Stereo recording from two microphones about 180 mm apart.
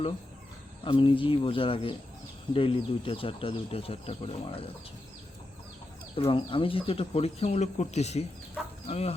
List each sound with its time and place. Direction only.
0.9 s speech: 30° left (ahead or behind)
6.1 s speech: 30° left (ahead or behind)